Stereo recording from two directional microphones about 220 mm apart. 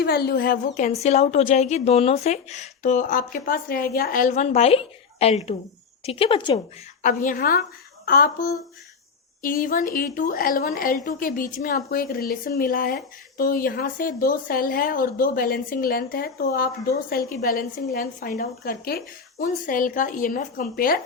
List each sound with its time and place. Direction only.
0.0 s a woman's voice: 45° left (ahead or behind); by 6.6 s 25° left (ahead or behind)
7.0 s a woman's voice: 35° left (ahead or behind)